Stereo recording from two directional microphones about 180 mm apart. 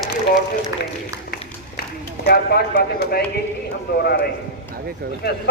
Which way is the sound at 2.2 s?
60° left (ahead or behind).